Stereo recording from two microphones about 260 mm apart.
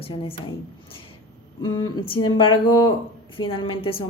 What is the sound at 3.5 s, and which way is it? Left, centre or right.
Speech, left.